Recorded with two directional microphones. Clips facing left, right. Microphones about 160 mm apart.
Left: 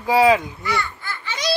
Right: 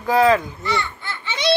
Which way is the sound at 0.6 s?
25° right (ahead or behind).